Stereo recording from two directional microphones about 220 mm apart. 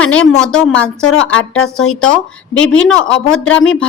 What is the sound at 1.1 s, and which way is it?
Speech, 65° left (ahead or behind).